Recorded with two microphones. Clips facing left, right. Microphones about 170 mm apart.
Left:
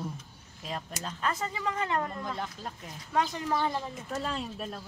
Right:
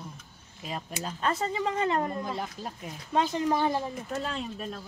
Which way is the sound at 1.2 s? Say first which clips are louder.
Right 4 dB; 25° right (ahead or behind).